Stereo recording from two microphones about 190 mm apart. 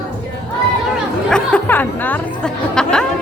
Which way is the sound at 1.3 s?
5° left (ahead or behind).